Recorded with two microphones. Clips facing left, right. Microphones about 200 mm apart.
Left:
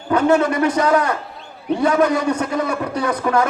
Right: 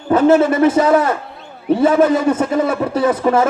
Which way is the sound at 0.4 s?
5° right (ahead or behind).